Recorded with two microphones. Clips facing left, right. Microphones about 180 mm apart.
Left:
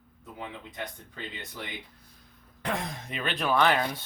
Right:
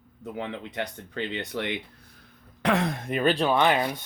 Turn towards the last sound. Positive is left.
turn(degrees=-20)  # may be behind; listen again after turning